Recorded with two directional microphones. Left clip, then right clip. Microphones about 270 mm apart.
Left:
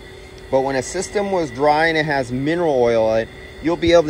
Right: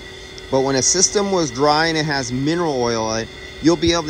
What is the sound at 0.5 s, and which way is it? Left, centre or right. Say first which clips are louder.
Speech: right 1 dB; centre.